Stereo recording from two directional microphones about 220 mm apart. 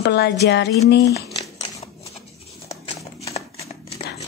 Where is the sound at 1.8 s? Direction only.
25° left (ahead or behind).